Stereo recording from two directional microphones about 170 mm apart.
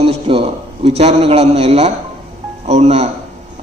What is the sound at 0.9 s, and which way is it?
Speech, 35° right (ahead or behind).